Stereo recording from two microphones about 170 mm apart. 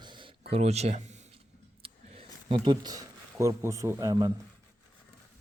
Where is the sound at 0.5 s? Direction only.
40° right (ahead or behind).